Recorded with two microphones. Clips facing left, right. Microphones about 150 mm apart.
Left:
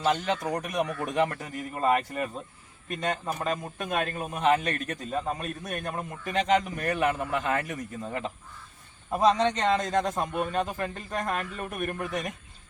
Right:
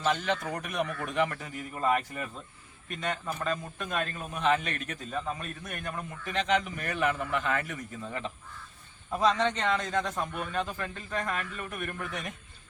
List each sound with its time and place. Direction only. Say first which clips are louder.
0.5 s a man's voice: left 3 dB; 40° left (ahead or behind)